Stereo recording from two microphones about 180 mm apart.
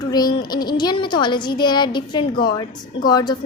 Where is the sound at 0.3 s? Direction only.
20° left (ahead or behind).